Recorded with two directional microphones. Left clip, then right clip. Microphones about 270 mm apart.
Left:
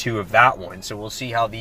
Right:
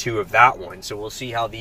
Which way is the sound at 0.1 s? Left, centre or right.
Centre.